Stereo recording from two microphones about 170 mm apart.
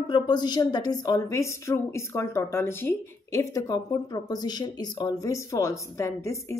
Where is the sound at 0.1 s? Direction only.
25° left (ahead or behind).